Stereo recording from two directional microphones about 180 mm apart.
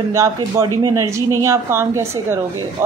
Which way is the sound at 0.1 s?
15° right (ahead or behind).